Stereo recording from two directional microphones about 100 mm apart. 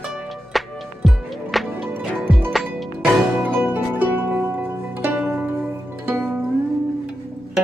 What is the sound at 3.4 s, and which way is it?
Zither, 20° right (ahead or behind).